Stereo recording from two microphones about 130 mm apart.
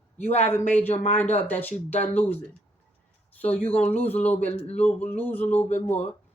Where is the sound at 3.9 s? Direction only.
15° left (ahead or behind).